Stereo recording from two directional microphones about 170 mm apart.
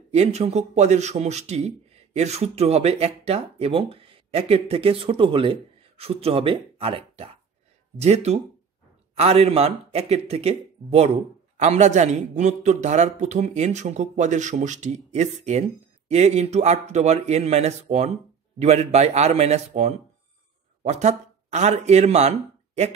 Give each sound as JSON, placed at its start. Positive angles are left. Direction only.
{"t": 0.1, "sound": "a man's voice", "side_deg": -40}